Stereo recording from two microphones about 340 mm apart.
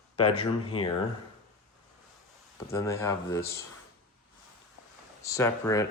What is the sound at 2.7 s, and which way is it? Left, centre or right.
Speech, centre.